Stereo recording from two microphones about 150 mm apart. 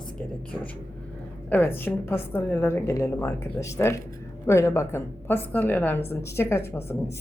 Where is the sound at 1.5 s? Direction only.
15° left (ahead or behind).